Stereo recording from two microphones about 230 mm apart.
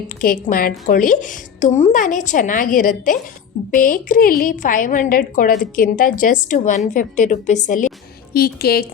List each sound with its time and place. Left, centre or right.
0.2 s a woman's voice: left